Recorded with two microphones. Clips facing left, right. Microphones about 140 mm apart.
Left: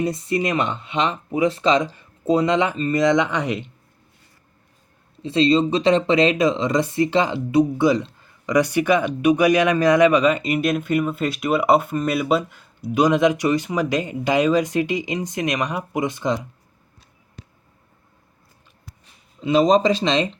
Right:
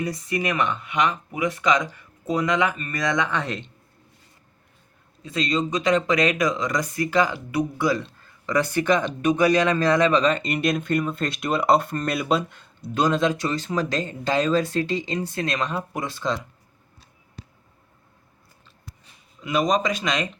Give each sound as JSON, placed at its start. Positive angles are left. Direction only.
{"t": 0.0, "sound": "speech", "side_deg": 25}
{"t": 5.2, "sound": "speech", "side_deg": 30}
{"t": 17.4, "sound": "a sound", "side_deg": -35}
{"t": 19.4, "sound": "speech", "side_deg": 25}